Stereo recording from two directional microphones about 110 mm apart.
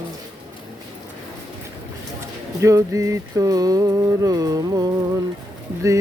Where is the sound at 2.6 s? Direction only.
30° right (ahead or behind).